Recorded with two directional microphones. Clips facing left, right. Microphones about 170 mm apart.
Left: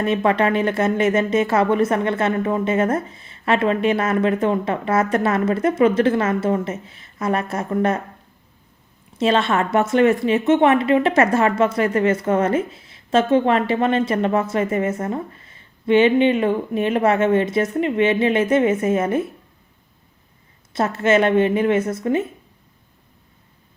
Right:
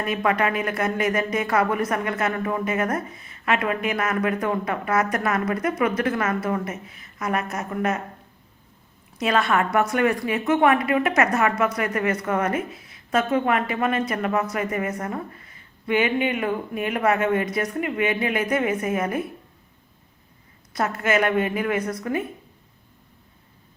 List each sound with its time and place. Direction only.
0.0 s a woman's voice: 25° left (ahead or behind)
9.1 s a woman's voice: 25° left (ahead or behind)
20.7 s a woman's voice: 25° left (ahead or behind)